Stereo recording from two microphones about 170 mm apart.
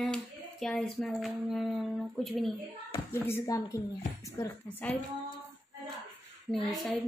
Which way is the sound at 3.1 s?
15° left (ahead or behind).